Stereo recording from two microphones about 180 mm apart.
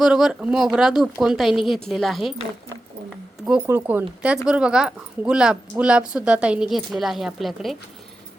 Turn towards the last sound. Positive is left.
turn(degrees=0)  # may be behind; listen again after turning